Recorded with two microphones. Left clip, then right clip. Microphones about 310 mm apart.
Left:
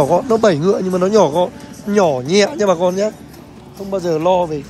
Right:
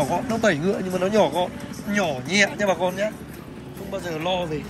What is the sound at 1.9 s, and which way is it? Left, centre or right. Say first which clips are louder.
Speech: left 8 dB; centre.